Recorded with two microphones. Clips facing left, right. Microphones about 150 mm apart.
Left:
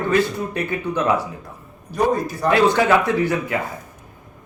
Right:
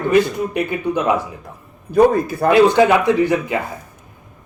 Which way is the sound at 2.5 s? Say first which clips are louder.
Right 4 dB; 20° right (ahead or behind).